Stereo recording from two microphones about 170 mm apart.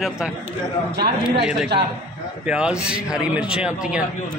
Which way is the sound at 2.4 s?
5° right (ahead or behind).